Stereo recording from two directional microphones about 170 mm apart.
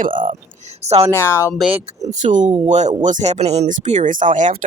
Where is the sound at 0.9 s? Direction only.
40° right (ahead or behind).